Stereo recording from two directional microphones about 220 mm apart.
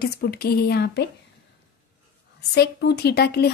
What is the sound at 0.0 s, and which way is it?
A woman's voice, 45° left (ahead or behind).